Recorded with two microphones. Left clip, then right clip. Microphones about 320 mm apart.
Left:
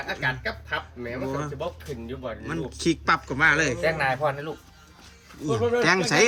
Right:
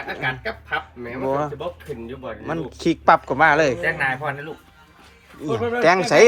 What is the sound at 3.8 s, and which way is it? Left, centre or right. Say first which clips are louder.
Speech: right 1 dB; left.